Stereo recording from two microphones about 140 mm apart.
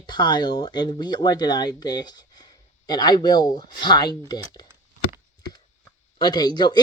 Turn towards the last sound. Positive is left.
turn(degrees=30)  # may be behind; listen again after turning